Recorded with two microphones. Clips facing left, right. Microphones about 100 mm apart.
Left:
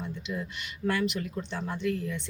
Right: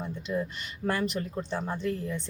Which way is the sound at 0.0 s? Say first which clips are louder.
Right 4 dB; 40° right (ahead or behind).